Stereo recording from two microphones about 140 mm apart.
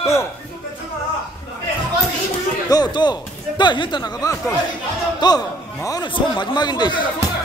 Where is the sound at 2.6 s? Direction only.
30° left (ahead or behind).